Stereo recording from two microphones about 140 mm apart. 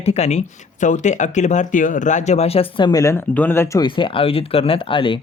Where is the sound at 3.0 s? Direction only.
15° left (ahead or behind).